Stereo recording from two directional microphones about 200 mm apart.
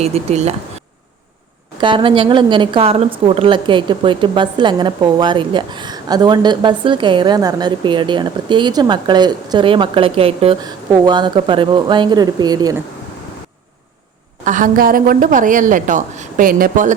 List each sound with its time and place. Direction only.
0.0 s a woman's voice: 30° right (ahead or behind)
1.8 s a woman's voice: 25° right (ahead or behind)
14.4 s a woman's voice: 40° right (ahead or behind)